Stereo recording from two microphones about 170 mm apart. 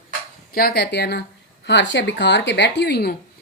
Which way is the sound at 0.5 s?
65° left (ahead or behind).